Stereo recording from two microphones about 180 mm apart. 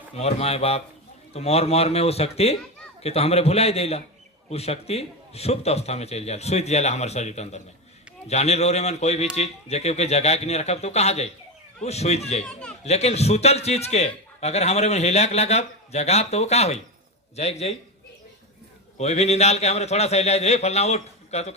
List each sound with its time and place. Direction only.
0.2 s a man's voice: 35° left (ahead or behind)
12.4 s speech: 5° left (ahead or behind)
12.8 s a man's voice: 35° left (ahead or behind)
18.9 s a man's voice: 35° left (ahead or behind)